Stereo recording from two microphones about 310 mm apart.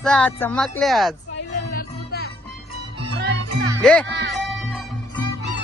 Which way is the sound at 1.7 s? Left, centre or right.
Left.